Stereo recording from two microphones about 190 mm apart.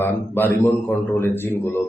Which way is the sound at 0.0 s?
10° left (ahead or behind).